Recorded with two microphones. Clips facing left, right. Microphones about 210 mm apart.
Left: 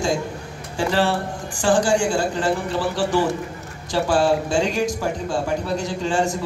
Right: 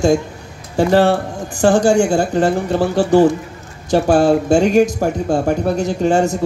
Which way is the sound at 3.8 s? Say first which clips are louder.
Right 6 dB; 60° right (ahead or behind).